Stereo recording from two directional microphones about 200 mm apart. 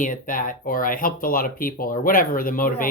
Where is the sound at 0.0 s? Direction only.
45° left (ahead or behind).